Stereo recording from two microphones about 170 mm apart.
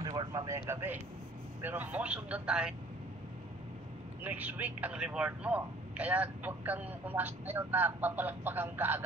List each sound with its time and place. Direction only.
0.0 s speech: 20° right (ahead or behind); by 2.7 s 5° right (ahead or behind)
4.2 s speech: 10° right (ahead or behind)